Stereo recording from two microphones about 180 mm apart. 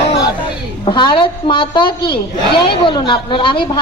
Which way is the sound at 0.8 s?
25° left (ahead or behind).